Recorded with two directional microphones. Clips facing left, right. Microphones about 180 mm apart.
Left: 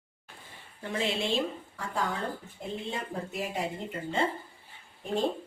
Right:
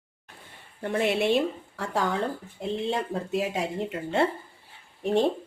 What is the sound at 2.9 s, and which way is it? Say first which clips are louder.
Speech: right 8 dB; 80° right.